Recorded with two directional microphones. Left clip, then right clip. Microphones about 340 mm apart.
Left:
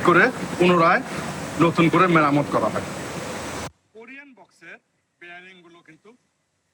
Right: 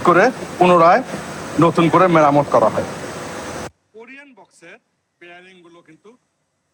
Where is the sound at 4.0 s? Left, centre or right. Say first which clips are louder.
Right 2 dB; centre.